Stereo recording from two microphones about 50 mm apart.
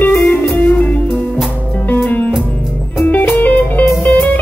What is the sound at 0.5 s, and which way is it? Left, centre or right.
Music, left.